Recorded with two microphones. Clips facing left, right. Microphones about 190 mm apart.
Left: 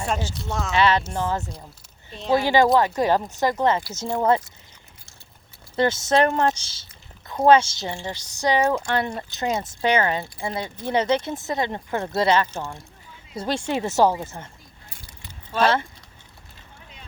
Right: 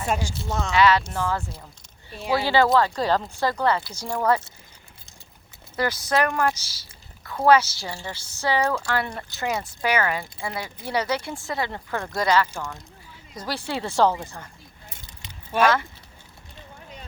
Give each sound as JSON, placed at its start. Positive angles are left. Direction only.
{"t": 0.1, "sound": "speech", "side_deg": -10}
{"t": 0.7, "sound": "speech", "side_deg": 25}
{"t": 5.7, "sound": "speech", "side_deg": 25}
{"t": 14.8, "sound": "keys jangling", "side_deg": -20}